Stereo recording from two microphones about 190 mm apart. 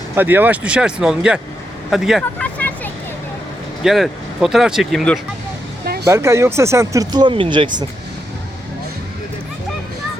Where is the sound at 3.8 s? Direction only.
Centre (ahead or behind).